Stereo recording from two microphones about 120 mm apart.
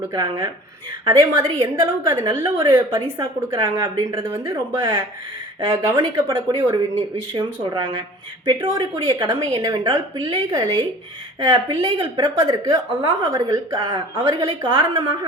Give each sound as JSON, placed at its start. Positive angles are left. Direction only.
{"t": 0.1, "sound": "a woman's voice", "side_deg": -30}
{"t": 5.7, "sound": "a woman's voice", "side_deg": -25}